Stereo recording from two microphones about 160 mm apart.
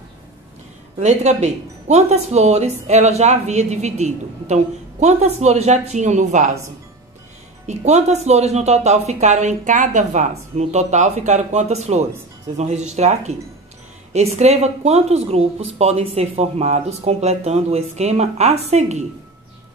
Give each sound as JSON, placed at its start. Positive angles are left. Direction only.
{"t": 0.9, "sound": "speech", "side_deg": -45}
{"t": 7.6, "sound": "speech", "side_deg": -45}